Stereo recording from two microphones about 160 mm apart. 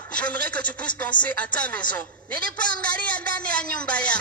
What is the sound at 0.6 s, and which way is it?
Speech, 55° left (ahead or behind).